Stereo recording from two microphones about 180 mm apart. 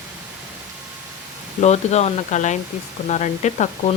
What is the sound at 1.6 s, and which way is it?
Speech, 40° left (ahead or behind).